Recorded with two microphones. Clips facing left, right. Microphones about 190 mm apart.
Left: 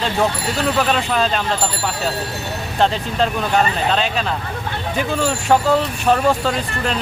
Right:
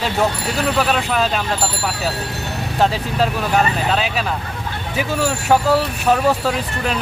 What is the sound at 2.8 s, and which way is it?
Speech, 5° right (ahead or behind).